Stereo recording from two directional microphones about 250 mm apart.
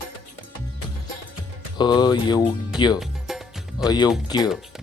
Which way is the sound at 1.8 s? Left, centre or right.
Centre.